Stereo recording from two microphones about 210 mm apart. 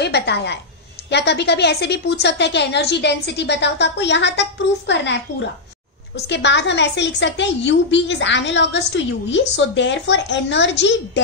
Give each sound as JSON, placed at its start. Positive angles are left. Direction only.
{"t": 0.0, "sound": "a woman's voice", "side_deg": 50}